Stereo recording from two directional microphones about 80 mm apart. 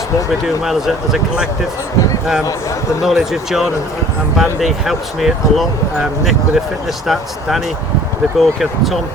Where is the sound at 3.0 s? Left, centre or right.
Centre.